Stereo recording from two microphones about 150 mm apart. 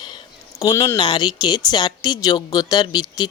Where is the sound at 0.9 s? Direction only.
30° left (ahead or behind).